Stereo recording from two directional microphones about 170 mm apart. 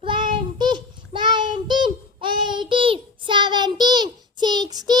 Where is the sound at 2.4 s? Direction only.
30° right (ahead or behind).